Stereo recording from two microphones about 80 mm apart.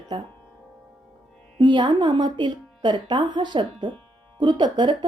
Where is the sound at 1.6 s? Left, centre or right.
Right.